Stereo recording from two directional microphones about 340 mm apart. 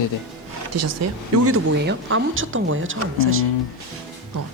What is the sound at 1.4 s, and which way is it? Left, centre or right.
Speech, right.